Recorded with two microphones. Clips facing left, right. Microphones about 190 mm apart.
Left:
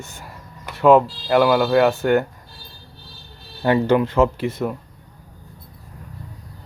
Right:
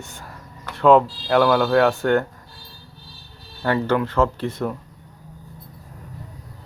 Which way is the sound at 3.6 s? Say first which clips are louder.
Left 4 dB; 15° left (ahead or behind).